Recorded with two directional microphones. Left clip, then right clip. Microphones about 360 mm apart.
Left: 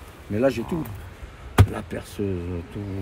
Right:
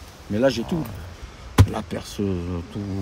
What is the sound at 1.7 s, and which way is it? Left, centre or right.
Speech, right.